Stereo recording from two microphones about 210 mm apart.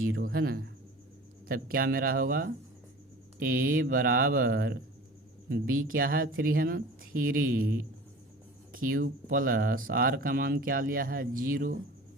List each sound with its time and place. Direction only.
0.2 s speech: 45° right (ahead or behind)